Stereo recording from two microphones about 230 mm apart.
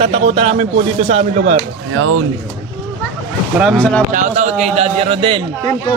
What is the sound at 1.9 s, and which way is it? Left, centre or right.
Speech, right.